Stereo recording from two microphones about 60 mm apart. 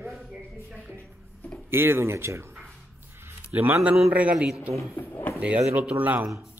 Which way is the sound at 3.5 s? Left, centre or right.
Right.